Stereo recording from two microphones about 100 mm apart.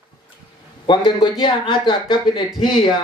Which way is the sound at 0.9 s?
55° left (ahead or behind).